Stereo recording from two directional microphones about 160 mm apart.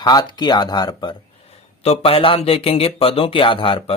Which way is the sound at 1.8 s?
40° left (ahead or behind).